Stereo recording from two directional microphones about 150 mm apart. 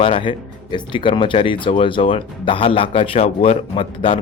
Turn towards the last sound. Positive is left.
turn(degrees=40)  # may be behind; listen again after turning